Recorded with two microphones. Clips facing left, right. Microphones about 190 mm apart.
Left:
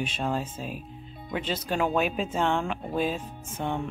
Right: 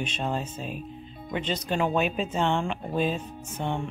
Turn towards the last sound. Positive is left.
turn(degrees=-15)  # may be behind; listen again after turning